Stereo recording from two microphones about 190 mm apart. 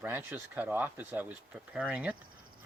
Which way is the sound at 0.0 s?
10° right (ahead or behind).